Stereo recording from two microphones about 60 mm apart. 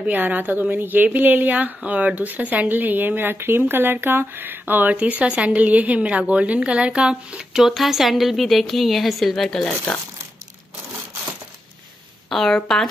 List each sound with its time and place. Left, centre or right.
0.0 s a woman's voice: right
4.9 s a woman's voice: right; by 9.7 s centre
12.3 s a woman's voice: centre